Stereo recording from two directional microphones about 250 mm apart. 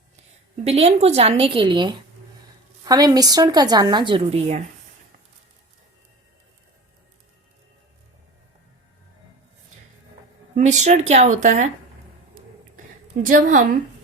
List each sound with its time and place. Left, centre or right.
0.5 s a woman's voice: right
10.5 s a woman's voice: right
13.2 s a woman's voice: right